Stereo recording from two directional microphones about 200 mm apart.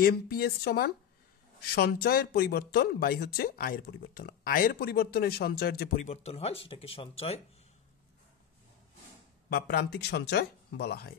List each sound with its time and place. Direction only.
0.0 s speech: 50° left (ahead or behind)
6.0 s speech: 30° left (ahead or behind)
9.5 s speech: 50° left (ahead or behind)